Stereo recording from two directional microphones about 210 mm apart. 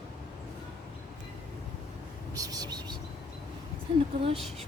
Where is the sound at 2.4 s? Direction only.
20° right (ahead or behind).